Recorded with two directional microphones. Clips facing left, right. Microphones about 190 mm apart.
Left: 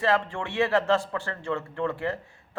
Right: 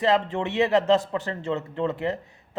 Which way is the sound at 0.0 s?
20° right (ahead or behind).